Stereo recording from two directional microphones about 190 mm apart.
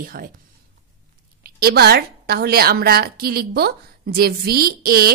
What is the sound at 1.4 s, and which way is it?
A woman's voice, 55° right (ahead or behind).